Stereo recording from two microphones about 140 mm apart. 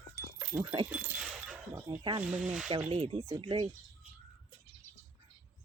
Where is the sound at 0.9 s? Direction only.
10° right (ahead or behind).